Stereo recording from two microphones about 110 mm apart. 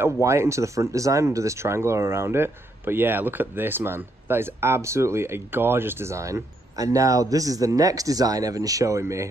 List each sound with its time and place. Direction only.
0.0 s speech: 25° right (ahead or behind)